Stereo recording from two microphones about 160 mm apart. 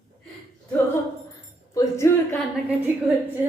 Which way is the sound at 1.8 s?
15° left (ahead or behind).